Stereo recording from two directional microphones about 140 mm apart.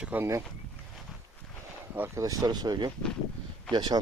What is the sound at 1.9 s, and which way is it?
Speech, 15° right (ahead or behind).